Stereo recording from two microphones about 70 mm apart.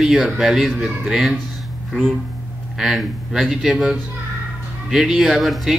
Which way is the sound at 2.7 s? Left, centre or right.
Centre.